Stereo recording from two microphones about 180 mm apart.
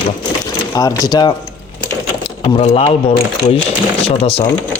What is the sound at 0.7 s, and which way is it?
Speech, 20° left (ahead or behind).